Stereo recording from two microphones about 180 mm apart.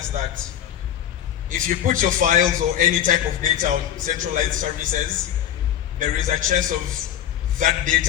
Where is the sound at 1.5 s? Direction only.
45° right (ahead or behind).